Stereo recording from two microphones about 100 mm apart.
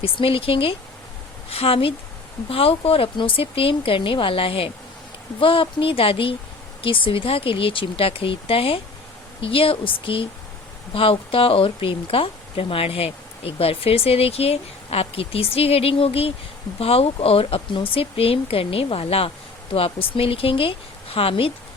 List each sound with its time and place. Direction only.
0.0 s speech: 65° left (ahead or behind)
1.5 s speech: 75° left (ahead or behind)